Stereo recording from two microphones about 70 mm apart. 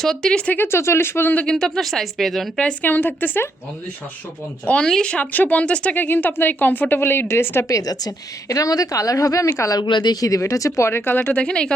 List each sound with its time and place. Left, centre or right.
0.0 s speech: centre
0.5 s speech: left
1.5 s speech: centre
2.6 s speech: centre
2.9 s speech: left
4.6 s speech: centre
7.7 s a woman's voice: left
9.6 s speech: left
10.4 s speech: left
11.2 s speech: centre